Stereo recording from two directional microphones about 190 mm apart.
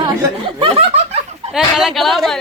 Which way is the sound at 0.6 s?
30° right (ahead or behind).